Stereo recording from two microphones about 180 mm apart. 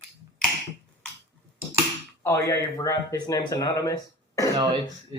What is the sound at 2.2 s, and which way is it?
Speech, 15° left (ahead or behind).